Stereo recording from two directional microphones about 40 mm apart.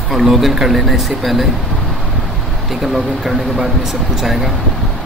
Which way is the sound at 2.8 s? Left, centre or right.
Centre.